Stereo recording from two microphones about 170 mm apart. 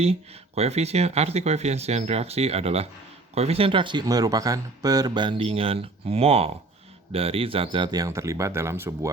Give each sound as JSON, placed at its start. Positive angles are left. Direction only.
{"t": 0.0, "sound": "speech", "side_deg": -35}